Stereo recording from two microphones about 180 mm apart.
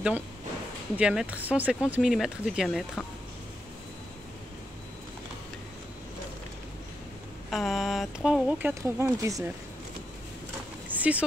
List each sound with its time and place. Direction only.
0.9 s speech: 5° right (ahead or behind)
7.5 s speech: centre (ahead or behind); by 9.4 s 15° right (ahead or behind)
10.9 s a sound: 10° right (ahead or behind)